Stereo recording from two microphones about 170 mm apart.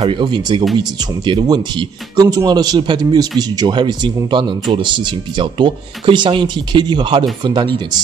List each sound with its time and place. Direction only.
0.0 s a man's voice: 30° right (ahead or behind)